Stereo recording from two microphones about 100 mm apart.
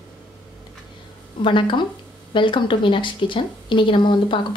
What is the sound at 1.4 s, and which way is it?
A woman's voice, 55° left (ahead or behind).